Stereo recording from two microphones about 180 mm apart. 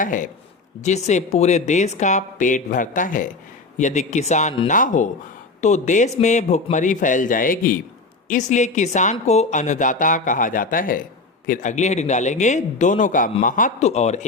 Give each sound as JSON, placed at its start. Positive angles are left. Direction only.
{"t": 0.0, "sound": "a man's voice", "side_deg": 45}